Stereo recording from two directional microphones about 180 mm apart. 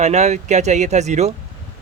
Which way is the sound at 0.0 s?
40° right (ahead or behind).